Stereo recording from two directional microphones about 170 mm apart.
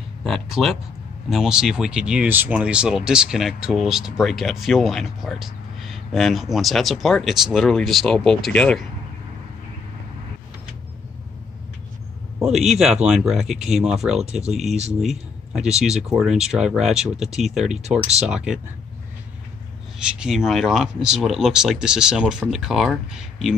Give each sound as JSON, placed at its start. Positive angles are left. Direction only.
{"t": 0.2, "sound": "speech", "side_deg": 0}
{"t": 12.4, "sound": "speech", "side_deg": 0}
{"t": 20.2, "sound": "speech", "side_deg": 0}